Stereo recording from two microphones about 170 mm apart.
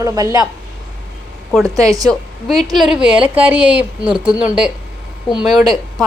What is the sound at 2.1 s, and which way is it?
A woman's voice, centre (ahead or behind).